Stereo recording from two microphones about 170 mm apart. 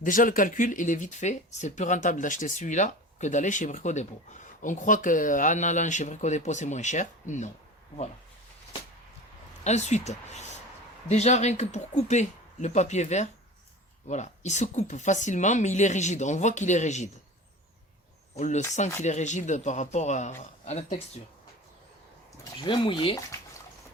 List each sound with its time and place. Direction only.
0.0 s speech: 55° left (ahead or behind)
9.6 s speech: 40° left (ahead or behind)
18.3 s speech: 45° left (ahead or behind)
22.6 s speech: 30° left (ahead or behind)